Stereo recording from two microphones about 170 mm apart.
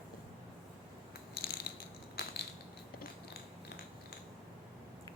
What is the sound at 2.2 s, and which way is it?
Crushing, 65° left (ahead or behind).